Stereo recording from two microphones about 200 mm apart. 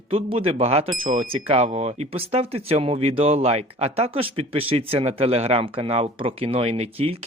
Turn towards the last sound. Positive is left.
turn(degrees=-30)  # may be behind; listen again after turning